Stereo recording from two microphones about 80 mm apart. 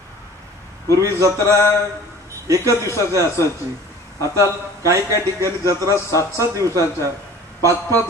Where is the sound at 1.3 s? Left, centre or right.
Left.